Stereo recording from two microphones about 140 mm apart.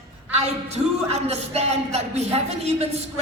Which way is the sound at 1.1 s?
50° right (ahead or behind).